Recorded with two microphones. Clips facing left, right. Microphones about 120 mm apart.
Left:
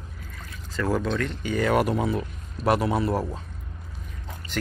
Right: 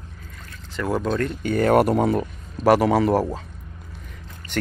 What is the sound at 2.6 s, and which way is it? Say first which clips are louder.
Speech: right 6 dB; 85° right.